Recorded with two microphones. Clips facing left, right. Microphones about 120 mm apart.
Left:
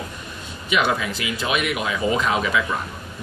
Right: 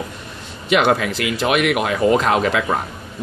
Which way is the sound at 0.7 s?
70° right (ahead or behind).